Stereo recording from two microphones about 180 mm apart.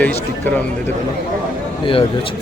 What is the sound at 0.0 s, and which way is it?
Speech, 10° left (ahead or behind).